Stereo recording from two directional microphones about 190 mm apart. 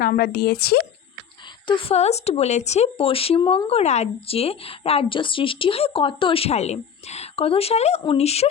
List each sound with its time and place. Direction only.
0.0 s speech: 50° left (ahead or behind)
1.6 s speech: 30° left (ahead or behind)